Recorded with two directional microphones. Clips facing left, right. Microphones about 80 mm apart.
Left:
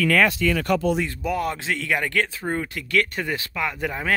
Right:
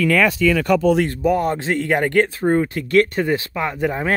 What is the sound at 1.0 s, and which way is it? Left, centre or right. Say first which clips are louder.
Speech: right 7 dB; right.